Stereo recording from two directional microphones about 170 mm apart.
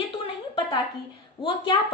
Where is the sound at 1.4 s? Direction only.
30° left (ahead or behind).